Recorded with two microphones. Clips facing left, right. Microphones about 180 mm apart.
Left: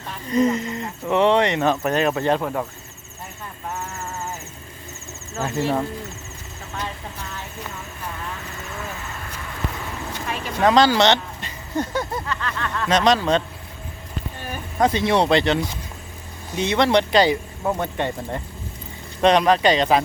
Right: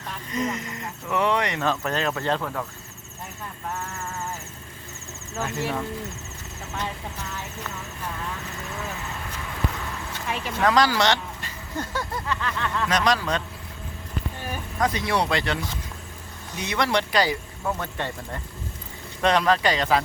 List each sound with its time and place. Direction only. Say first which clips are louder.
0.3 s speech: left 9 dB; 30° left (ahead or behind)
5.4 s speech: left 5 dB; 35° left (ahead or behind)
10.6 s speech: left 5 dB; 25° left (ahead or behind)
12.3 s speech: even; 15° right (ahead or behind)
12.9 s speech: left 7 dB; 25° left (ahead or behind)
14.8 s speech: left 6 dB; 25° left (ahead or behind)